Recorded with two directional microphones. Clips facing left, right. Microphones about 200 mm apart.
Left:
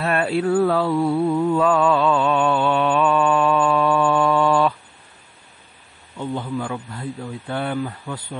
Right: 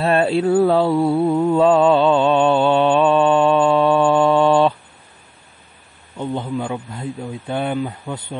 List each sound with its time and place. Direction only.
0.0 s mantra: 30° right (ahead or behind)
6.1 s a man's voice: 20° right (ahead or behind)